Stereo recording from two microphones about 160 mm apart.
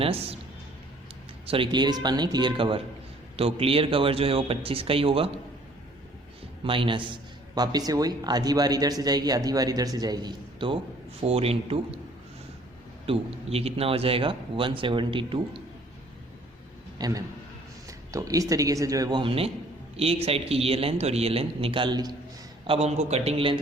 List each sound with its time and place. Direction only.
0.0 s speech: 40° right (ahead or behind)
1.5 s speech: 35° right (ahead or behind)
6.7 s speech: 30° right (ahead or behind)
13.1 s speech: 40° right (ahead or behind)
17.0 s a man's voice: 20° right (ahead or behind)
22.6 s speech: 40° right (ahead or behind)